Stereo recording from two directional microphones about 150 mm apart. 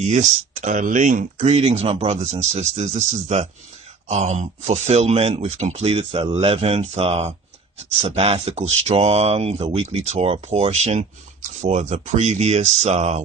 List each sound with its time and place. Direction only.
0.0 s speech: 50° right (ahead or behind)
1.5 s speech: 45° right (ahead or behind)